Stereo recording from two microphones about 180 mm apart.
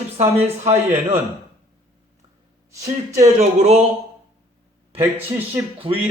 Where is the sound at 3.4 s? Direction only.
35° right (ahead or behind).